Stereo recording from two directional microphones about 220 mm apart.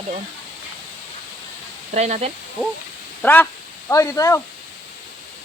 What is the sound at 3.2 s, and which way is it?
Speech, 10° left (ahead or behind).